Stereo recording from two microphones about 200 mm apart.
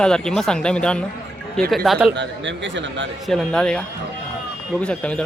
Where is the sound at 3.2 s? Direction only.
Centre (ahead or behind).